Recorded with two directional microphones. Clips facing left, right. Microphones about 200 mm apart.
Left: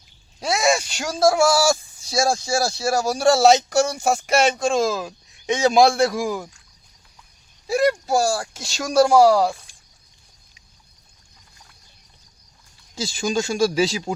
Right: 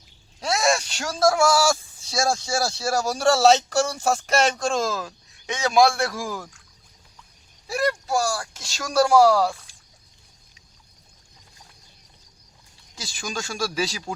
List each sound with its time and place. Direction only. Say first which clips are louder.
0.3 s a sound: left 2 dB; 5° left (ahead or behind)
0.9 s speech: left 2 dB; 10° left (ahead or behind)
7.7 s speech: left 5 dB; 25° left (ahead or behind)
13.0 s speech: left 9 dB; 25° left (ahead or behind)